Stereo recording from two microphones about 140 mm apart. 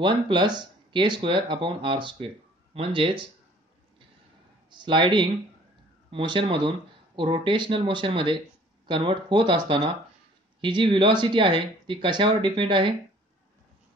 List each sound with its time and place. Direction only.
0.0 s speech: 35° right (ahead or behind)
4.6 s a man's voice: 35° right (ahead or behind)